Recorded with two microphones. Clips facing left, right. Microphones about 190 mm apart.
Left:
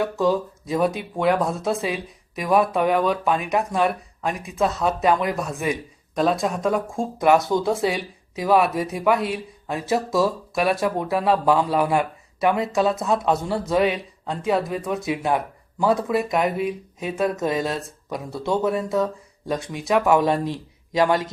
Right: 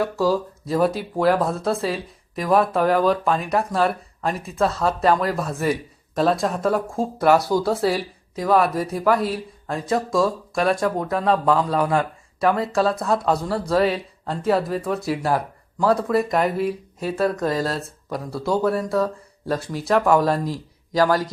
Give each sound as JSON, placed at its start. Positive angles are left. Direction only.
{"t": 0.0, "sound": "speech", "side_deg": 0}
{"t": 3.8, "sound": "speech", "side_deg": 15}
{"t": 6.1, "sound": "speech", "side_deg": 0}
{"t": 7.2, "sound": "speech", "side_deg": 15}
{"t": 7.6, "sound": "speech", "side_deg": 0}
{"t": 12.4, "sound": "speech", "side_deg": 20}
{"t": 13.0, "sound": "speech", "side_deg": 0}
{"t": 13.7, "sound": "speech", "side_deg": 20}
{"t": 14.3, "sound": "speech", "side_deg": 0}
{"t": 18.6, "sound": "speech", "side_deg": 20}
{"t": 19.5, "sound": "speech", "side_deg": 0}
{"t": 20.9, "sound": "speech", "side_deg": 25}